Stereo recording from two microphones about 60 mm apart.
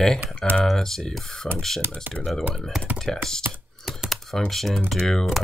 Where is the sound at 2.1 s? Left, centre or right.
Right.